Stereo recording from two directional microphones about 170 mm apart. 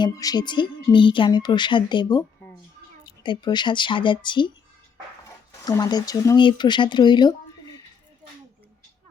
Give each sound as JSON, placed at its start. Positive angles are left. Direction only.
{"t": 0.0, "sound": "speech", "side_deg": 25}